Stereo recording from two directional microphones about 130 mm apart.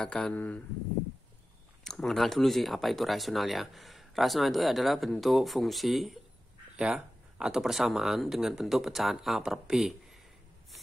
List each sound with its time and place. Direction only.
0.0 s speech: 5° left (ahead or behind)
1.9 s speech: 5° left (ahead or behind)